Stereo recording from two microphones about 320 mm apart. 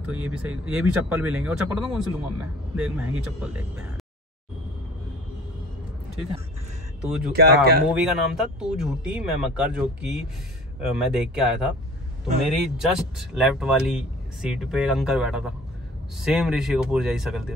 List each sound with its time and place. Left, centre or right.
0.0 s speech: centre
7.0 s speech: centre
7.3 s speech: right
7.9 s speech: centre